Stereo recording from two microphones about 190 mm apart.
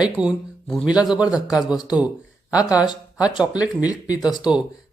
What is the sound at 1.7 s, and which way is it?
Speech, 20° left (ahead or behind).